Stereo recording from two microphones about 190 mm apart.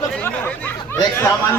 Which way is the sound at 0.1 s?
10° left (ahead or behind).